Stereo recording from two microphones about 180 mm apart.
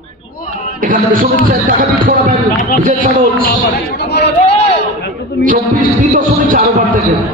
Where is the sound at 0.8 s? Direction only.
50° right (ahead or behind).